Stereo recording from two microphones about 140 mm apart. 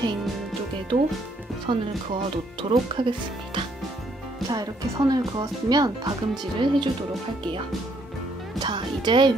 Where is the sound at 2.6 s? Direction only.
35° right (ahead or behind).